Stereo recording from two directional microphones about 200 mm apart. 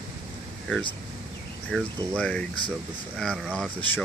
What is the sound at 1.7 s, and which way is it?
Speech, 5° left (ahead or behind).